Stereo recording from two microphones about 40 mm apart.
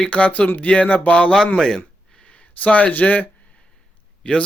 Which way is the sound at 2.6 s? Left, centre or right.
Left.